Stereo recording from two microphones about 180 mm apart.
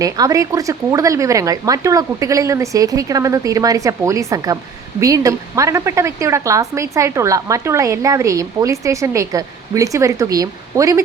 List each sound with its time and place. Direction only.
0.0 s a woman's voice: 20° right (ahead or behind)